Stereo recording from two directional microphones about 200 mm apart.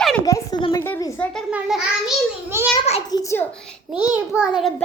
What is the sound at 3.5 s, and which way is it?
Speech, 5° left (ahead or behind).